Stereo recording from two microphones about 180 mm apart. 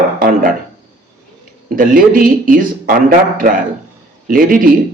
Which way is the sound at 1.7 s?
50° right (ahead or behind).